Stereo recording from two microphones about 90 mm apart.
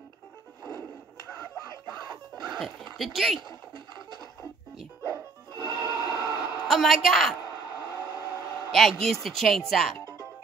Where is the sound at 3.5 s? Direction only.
55° right (ahead or behind).